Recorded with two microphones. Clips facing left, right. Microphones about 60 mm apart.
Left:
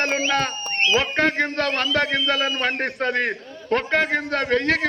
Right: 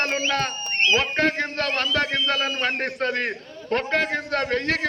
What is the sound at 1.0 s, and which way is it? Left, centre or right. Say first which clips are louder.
A man's voice: left 2 dB; centre.